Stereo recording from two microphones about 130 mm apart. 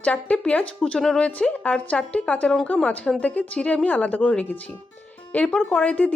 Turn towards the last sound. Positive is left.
turn(degrees=10)  # may be behind; listen again after turning